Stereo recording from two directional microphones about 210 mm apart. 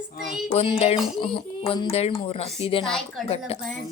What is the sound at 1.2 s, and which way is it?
Speech, 25° left (ahead or behind).